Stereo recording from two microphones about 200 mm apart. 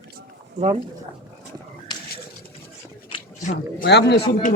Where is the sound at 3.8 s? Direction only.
55° left (ahead or behind).